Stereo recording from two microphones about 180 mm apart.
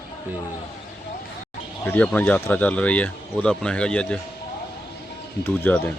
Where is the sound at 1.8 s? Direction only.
10° left (ahead or behind).